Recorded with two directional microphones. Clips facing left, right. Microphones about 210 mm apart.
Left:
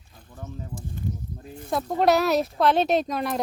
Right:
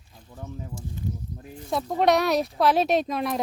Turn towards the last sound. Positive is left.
turn(degrees=0)  # may be behind; listen again after turning